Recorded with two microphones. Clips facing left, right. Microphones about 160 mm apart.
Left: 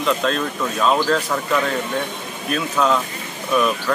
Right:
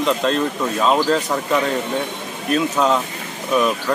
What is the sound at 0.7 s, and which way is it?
Speech, 10° right (ahead or behind).